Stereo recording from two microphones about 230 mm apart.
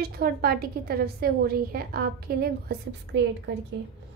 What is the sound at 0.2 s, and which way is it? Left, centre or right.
A woman's voice, right.